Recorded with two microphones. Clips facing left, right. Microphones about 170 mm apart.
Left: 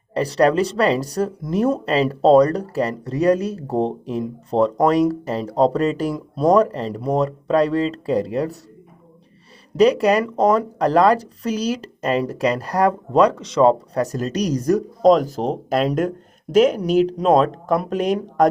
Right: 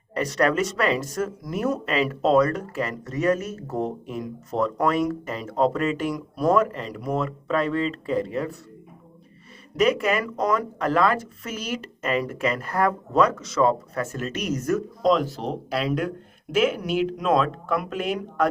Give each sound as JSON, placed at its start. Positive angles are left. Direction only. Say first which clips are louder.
{"t": 0.1, "sound": "speech", "louder": "left 5 dB", "side_deg": 30}
{"t": 9.7, "sound": "speech", "louder": "left 6 dB", "side_deg": 35}